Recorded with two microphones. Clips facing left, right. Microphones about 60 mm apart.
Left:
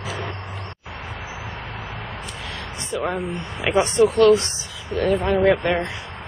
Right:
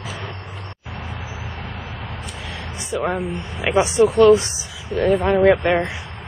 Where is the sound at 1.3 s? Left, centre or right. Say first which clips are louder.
Even; left.